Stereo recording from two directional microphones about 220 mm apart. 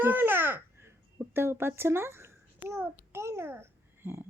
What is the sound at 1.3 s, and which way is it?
Babbling, 10° right (ahead or behind).